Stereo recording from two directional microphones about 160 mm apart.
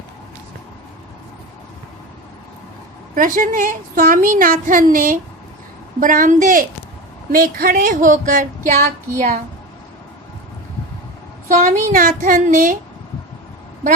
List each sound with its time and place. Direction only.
3.2 s a woman's voice: 55° right (ahead or behind)
11.4 s a woman's voice: 50° right (ahead or behind)